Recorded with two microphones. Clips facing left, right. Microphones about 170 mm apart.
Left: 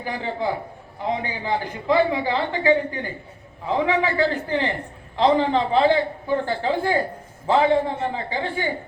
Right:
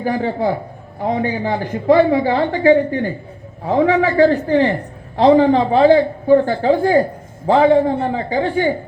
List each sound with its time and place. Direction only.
0.0 s a man's voice: 40° right (ahead or behind)